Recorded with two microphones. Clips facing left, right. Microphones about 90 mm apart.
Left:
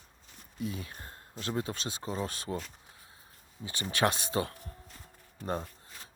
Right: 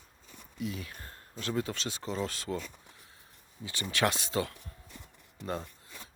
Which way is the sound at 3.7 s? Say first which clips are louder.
Left 1 dB; 25° left (ahead or behind).